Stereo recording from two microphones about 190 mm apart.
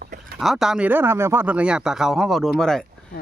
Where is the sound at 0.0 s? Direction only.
50° right (ahead or behind).